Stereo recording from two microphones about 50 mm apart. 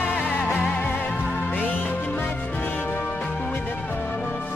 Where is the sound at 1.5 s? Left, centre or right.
Left.